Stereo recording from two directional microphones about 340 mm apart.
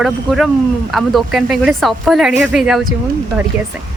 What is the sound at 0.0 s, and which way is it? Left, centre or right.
Speech, centre.